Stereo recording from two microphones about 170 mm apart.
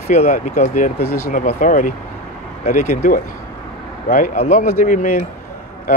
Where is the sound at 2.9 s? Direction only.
60° left (ahead or behind).